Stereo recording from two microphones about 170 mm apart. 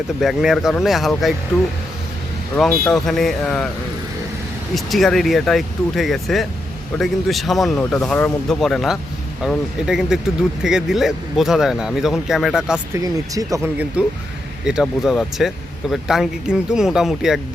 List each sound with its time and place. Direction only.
0.2 s speech: centre (ahead or behind)
2.6 s speech: 5° left (ahead or behind)
4.7 s speech: centre (ahead or behind)
13.3 s speech: 20° right (ahead or behind)
14.0 s speech: 5° right (ahead or behind)